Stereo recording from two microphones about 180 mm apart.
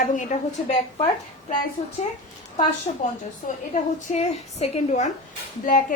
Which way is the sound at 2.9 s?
30° left (ahead or behind).